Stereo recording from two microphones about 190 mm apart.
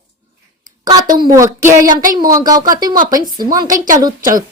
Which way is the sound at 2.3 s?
20° right (ahead or behind).